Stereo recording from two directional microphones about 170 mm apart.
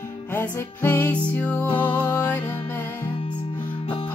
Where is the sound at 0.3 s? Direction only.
15° left (ahead or behind).